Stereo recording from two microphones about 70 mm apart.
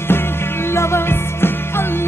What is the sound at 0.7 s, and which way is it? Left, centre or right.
Music, left.